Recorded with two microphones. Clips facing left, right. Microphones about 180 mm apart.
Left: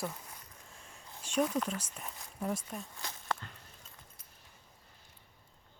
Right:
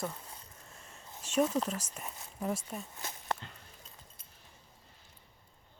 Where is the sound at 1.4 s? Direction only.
25° right (ahead or behind).